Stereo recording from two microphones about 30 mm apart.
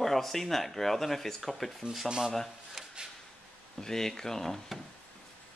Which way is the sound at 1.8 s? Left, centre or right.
Right.